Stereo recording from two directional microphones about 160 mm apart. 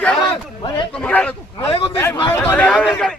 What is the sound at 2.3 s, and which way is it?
Speech, 10° left (ahead or behind).